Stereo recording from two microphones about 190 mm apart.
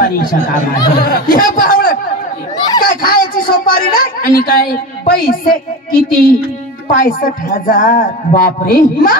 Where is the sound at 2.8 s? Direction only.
50° left (ahead or behind).